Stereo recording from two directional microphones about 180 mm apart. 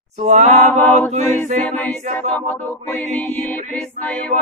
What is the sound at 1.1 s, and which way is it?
Chant, 40° right (ahead or behind).